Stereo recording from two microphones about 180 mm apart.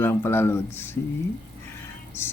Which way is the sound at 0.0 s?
15° left (ahead or behind).